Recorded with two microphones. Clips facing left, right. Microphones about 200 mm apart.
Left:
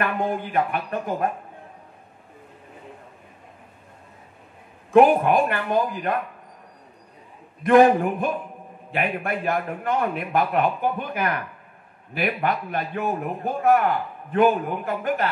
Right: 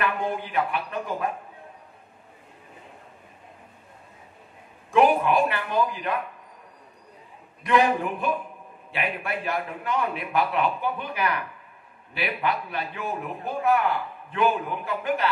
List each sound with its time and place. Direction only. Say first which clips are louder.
0.0 s a sound: left 2 dB; 50° left (ahead or behind)
0.6 s a man's voice: left 3 dB; 50° left (ahead or behind)
4.9 s a man's voice: left 4 dB; 50° left (ahead or behind)
7.6 s a man's voice: left 7 dB; 50° left (ahead or behind)